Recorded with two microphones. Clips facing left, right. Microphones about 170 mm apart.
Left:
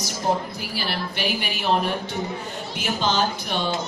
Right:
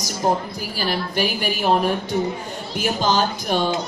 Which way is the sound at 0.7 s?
45° right (ahead or behind).